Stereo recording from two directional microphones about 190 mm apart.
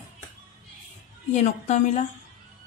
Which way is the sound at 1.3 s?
40° left (ahead or behind).